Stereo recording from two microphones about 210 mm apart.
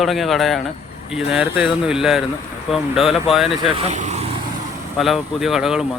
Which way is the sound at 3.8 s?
35° right (ahead or behind).